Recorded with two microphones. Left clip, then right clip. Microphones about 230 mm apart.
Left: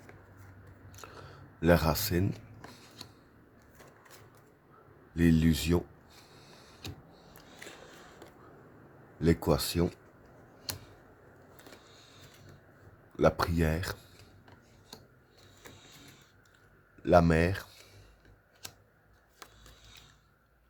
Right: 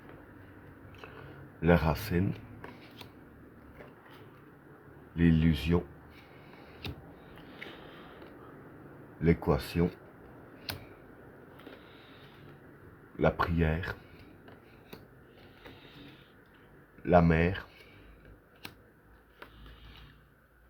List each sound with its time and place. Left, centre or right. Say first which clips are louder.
0.9 s a sound: even; left
1.6 s speech: left 1 dB; left
5.1 s speech: left 1 dB; left
9.2 s speech: left 1 dB; left
10.7 s a sound: even; centre
13.1 s speech: left 1 dB; left
17.0 s speech: left 1 dB; left